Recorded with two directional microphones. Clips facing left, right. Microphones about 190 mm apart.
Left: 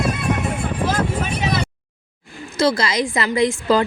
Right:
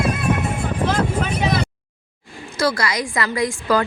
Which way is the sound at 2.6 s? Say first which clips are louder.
Left 3 dB; 25° left (ahead or behind).